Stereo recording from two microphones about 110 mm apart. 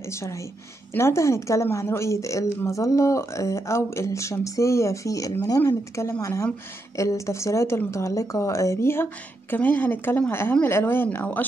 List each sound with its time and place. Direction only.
0.0 s a woman's voice: 25° left (ahead or behind)